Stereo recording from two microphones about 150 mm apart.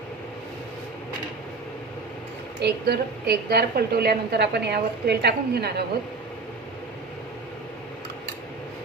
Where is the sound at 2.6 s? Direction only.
90° right.